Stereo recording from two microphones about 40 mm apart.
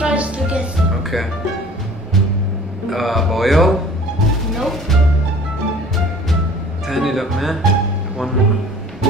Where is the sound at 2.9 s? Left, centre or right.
Centre.